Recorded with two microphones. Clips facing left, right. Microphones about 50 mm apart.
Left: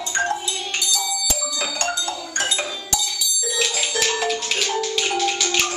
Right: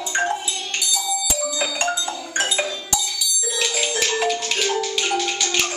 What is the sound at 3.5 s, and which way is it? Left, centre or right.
Music, centre.